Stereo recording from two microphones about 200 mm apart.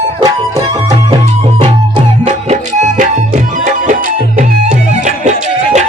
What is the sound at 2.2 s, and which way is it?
Music, 35° right (ahead or behind).